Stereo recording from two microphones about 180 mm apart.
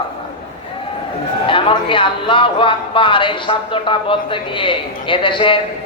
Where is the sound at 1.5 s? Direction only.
30° left (ahead or behind).